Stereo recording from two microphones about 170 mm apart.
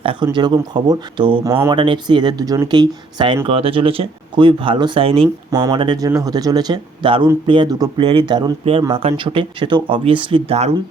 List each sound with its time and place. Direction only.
0.0 s speech: 30° right (ahead or behind)
5.5 s speech: 20° right (ahead or behind); by 10.8 s 35° right (ahead or behind)